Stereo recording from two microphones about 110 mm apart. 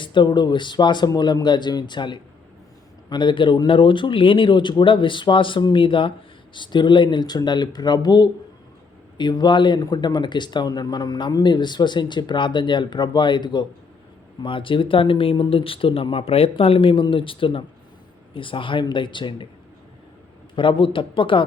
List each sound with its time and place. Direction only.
0.0 s speech: 45° left (ahead or behind)
20.6 s speech: 50° left (ahead or behind)